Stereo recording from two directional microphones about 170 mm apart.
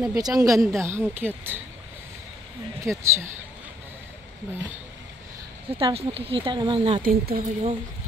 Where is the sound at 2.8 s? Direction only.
15° right (ahead or behind).